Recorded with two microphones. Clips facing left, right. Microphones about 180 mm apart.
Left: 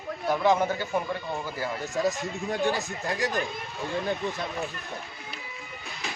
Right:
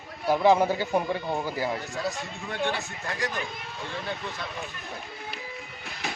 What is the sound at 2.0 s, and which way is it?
Speech, 40° left (ahead or behind).